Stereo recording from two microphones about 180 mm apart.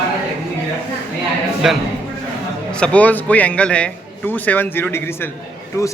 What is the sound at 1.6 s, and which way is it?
A man's voice, 5° right (ahead or behind).